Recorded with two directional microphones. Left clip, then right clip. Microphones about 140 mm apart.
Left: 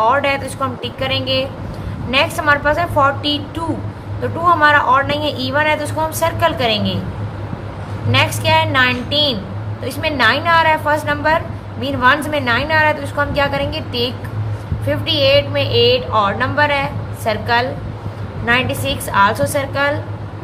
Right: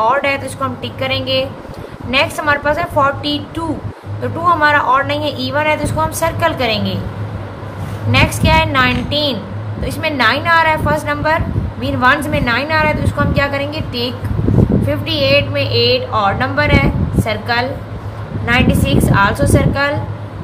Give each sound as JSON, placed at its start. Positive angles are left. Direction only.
{"t": 0.0, "sound": "a woman's voice", "side_deg": 20}
{"t": 8.1, "sound": "a woman's voice", "side_deg": 20}